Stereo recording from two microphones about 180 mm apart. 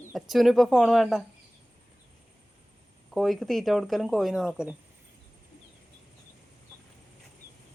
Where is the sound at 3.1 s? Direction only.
Centre (ahead or behind).